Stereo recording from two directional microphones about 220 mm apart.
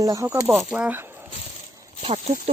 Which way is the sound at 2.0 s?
30° right (ahead or behind).